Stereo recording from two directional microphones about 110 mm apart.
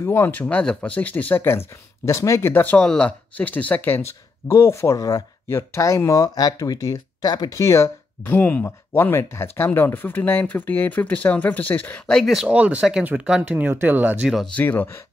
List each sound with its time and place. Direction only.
0.0 s speech: 20° left (ahead or behind)
8.3 s speech: 15° left (ahead or behind)
12.4 s speech: 15° right (ahead or behind)
14.3 s speech: 5° left (ahead or behind)
14.6 s speech: 15° left (ahead or behind)